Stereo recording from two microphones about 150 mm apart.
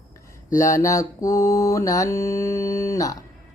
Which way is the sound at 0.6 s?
20° left (ahead or behind).